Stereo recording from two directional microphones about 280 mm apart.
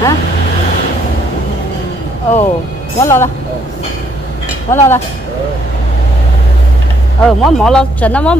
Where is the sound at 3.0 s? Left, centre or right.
Centre.